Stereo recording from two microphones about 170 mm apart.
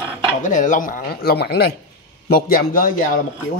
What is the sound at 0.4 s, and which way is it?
Speech, 45° left (ahead or behind).